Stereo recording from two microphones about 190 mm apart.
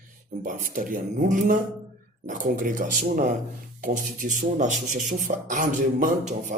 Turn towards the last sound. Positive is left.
turn(degrees=-45)  # may be behind; listen again after turning